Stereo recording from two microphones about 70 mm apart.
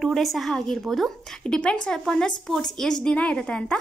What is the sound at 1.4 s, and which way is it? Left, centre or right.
A woman's voice, centre.